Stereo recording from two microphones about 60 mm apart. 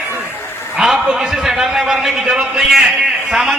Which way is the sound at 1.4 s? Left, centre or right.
Centre.